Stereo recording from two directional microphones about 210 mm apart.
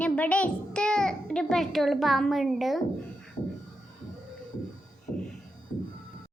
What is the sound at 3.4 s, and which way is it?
Music, 30° left (ahead or behind).